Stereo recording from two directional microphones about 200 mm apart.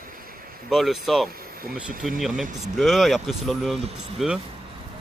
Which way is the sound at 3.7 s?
30° right (ahead or behind).